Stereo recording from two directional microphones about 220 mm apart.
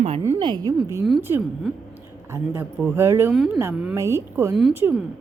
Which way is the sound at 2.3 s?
10° right (ahead or behind).